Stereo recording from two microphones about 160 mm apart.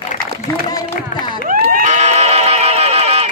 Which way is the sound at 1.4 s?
60° right (ahead or behind).